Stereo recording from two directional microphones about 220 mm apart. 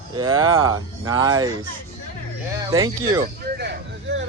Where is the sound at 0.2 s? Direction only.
20° right (ahead or behind).